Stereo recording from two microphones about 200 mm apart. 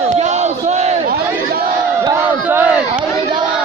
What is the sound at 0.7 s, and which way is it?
Crowd, 35° right (ahead or behind).